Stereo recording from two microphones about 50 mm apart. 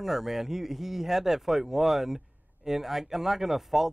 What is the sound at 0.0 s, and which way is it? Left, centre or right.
Speech, centre.